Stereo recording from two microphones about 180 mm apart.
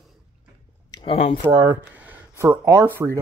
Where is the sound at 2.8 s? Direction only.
15° right (ahead or behind).